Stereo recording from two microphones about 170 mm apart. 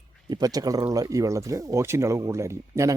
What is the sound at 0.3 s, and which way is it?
Speech, 20° right (ahead or behind).